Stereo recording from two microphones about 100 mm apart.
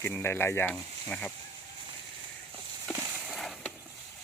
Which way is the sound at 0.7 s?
15° left (ahead or behind).